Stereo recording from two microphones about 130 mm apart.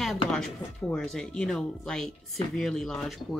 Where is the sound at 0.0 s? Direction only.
Centre (ahead or behind).